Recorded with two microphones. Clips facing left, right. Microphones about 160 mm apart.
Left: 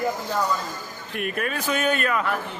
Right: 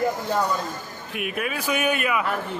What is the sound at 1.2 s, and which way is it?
Speech, 5° right (ahead or behind).